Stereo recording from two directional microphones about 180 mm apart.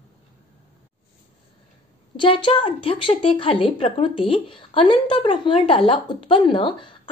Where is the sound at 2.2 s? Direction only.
30° left (ahead or behind).